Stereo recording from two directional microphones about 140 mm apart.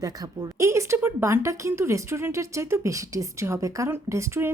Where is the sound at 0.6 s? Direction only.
20° right (ahead or behind).